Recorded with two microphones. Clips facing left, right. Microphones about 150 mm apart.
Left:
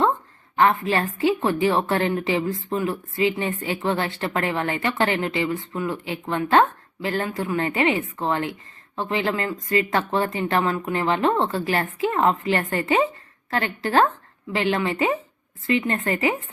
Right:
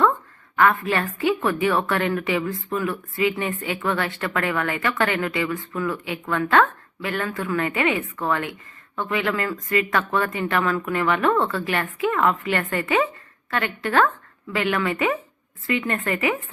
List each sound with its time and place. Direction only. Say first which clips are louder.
0.5 s a woman's voice: even; 25° left (ahead or behind)